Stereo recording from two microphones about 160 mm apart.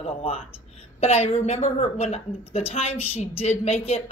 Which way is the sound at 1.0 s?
40° left (ahead or behind).